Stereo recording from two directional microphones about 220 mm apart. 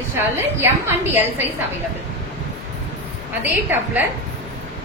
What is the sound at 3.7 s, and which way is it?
Speech, 10° right (ahead or behind).